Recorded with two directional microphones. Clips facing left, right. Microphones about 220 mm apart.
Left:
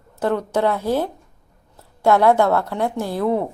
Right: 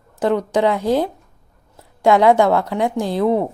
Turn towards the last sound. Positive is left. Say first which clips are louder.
# right 3 dB
turn(degrees=-15)  # may be behind; listen again after turning